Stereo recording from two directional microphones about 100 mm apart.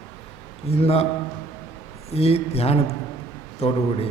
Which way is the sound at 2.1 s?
90° left.